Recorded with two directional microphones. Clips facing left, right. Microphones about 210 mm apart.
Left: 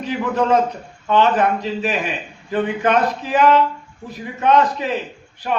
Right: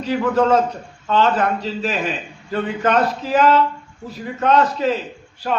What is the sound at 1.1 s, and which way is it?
A man's voice, 15° left (ahead or behind).